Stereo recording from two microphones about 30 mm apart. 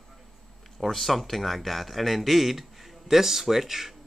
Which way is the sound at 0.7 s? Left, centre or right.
Centre.